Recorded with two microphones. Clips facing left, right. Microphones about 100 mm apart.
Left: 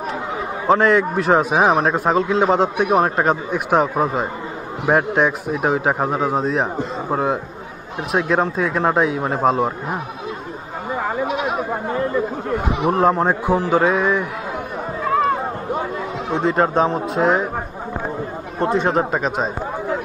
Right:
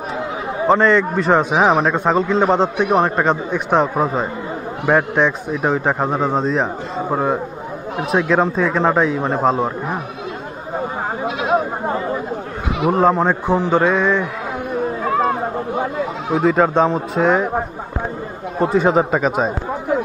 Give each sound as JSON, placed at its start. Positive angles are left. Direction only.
{"t": 0.7, "sound": "a man's voice", "side_deg": 5}
{"t": 8.1, "sound": "a man's voice", "side_deg": 0}
{"t": 9.4, "sound": "a man's voice", "side_deg": -25}
{"t": 12.9, "sound": "speech", "side_deg": 0}
{"t": 16.3, "sound": "a man's voice", "side_deg": 0}
{"t": 18.6, "sound": "a man's voice", "side_deg": -5}